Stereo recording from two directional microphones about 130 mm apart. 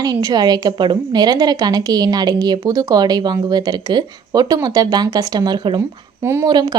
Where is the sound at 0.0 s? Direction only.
30° right (ahead or behind).